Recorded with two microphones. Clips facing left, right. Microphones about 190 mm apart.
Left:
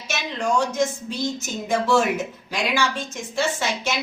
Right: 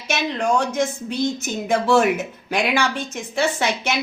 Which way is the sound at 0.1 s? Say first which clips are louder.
Right 3 dB; 60° right (ahead or behind).